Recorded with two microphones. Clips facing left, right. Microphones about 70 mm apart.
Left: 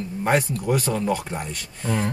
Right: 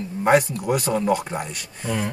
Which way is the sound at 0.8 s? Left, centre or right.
Right.